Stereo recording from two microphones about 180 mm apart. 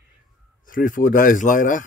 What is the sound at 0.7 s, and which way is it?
Speech, 50° left (ahead or behind).